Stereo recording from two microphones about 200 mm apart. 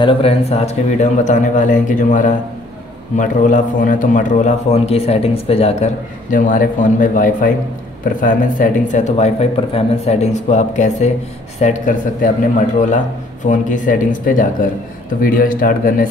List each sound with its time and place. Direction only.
0.0 s a man's voice: 25° left (ahead or behind)
6.3 s a man's voice: 45° left (ahead or behind)